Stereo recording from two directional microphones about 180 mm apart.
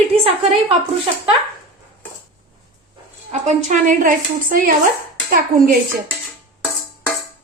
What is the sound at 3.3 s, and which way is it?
Speech, 40° right (ahead or behind).